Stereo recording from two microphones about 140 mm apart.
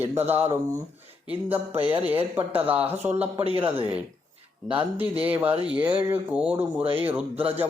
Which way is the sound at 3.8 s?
10° right (ahead or behind).